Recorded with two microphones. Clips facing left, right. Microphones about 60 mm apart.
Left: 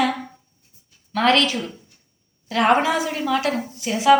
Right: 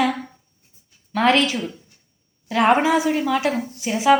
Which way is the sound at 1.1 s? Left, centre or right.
Centre.